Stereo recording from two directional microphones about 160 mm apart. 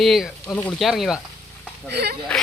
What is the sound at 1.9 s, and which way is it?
Speech, 90° right.